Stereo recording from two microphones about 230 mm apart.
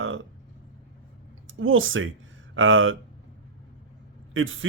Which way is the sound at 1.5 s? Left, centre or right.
Right.